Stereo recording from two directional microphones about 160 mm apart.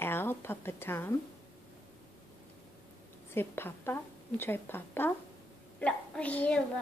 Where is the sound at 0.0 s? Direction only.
15° left (ahead or behind).